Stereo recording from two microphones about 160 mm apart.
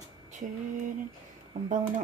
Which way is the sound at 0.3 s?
50° right (ahead or behind).